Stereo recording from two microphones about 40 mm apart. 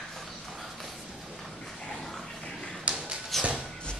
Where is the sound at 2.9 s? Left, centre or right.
Right.